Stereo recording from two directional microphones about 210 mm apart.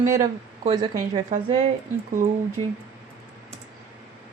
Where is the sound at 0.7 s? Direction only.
20° right (ahead or behind).